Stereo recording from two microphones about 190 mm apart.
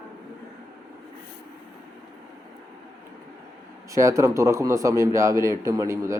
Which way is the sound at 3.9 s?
15° right (ahead or behind).